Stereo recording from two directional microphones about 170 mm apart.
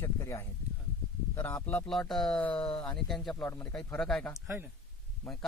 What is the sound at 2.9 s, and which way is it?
Speech, centre (ahead or behind).